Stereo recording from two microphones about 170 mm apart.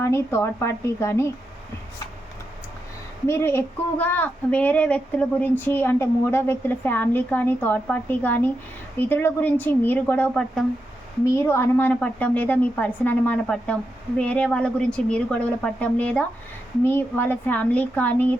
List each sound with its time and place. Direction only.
0.0 s speech: 15° left (ahead or behind)
3.2 s speech: 15° left (ahead or behind)